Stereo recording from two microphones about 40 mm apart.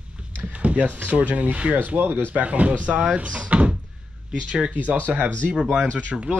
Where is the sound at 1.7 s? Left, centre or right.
Right.